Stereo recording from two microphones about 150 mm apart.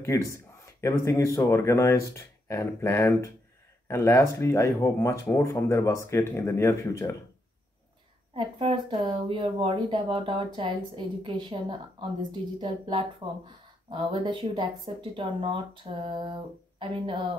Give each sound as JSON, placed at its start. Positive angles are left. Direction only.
{"t": 0.0, "sound": "speech", "side_deg": 20}
{"t": 8.4, "sound": "speech", "side_deg": -30}